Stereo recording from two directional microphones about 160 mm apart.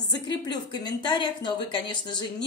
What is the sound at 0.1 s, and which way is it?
Speech, 25° left (ahead or behind).